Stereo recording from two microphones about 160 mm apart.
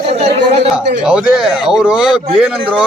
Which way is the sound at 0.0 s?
40° right (ahead or behind).